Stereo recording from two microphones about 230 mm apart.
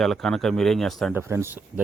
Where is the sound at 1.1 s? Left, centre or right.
Centre.